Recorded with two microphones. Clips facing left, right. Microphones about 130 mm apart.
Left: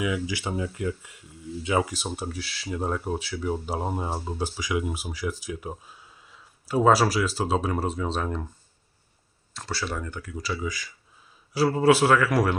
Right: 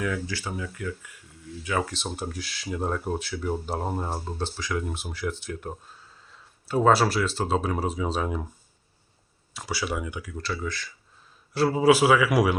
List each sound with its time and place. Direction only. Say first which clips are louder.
0.0 s speech: left 2 dB; 10° left (ahead or behind)
0.4 s speech: left 4 dB; 25° left (ahead or behind)
1.9 s speech: left 1 dB; 5° left (ahead or behind)
9.6 s speech: right 2 dB; 10° right (ahead or behind)
10.3 s speech: left 2 dB; 5° left (ahead or behind)